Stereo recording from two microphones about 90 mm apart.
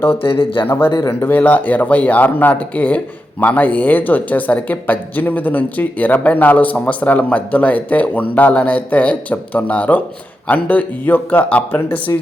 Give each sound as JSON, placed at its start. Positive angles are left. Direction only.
{"t": 0.2, "sound": "speech", "side_deg": 85}
{"t": 0.6, "sound": "speech", "side_deg": 25}